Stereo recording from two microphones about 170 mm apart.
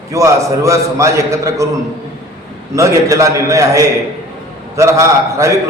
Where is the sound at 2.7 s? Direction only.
20° right (ahead or behind).